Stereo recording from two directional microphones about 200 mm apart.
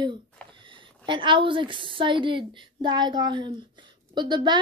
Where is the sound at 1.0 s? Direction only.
25° right (ahead or behind).